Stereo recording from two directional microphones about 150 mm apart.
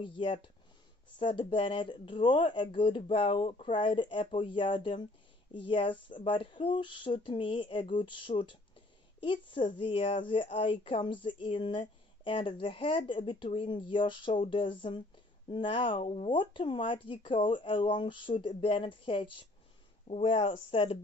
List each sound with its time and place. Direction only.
0.0 s speech: 35° left (ahead or behind)